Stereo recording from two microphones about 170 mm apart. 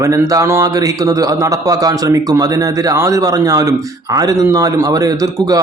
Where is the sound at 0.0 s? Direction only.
20° right (ahead or behind).